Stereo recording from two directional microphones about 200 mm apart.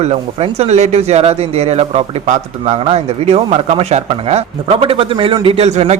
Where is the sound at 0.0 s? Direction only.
30° right (ahead or behind).